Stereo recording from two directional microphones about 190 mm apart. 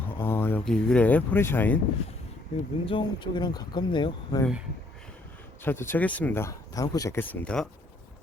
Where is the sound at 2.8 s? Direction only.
25° left (ahead or behind).